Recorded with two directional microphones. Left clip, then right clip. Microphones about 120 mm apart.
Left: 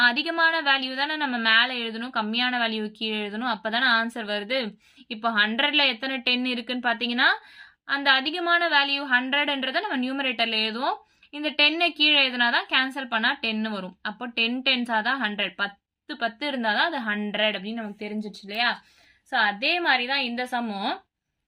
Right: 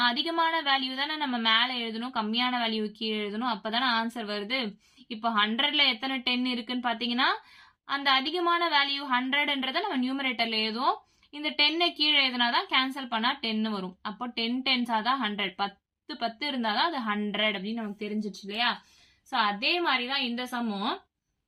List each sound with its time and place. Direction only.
0.0 s a woman's voice: 30° left (ahead or behind)